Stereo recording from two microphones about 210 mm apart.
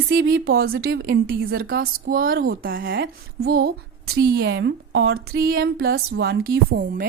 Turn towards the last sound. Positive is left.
turn(degrees=-45)  # may be behind; listen again after turning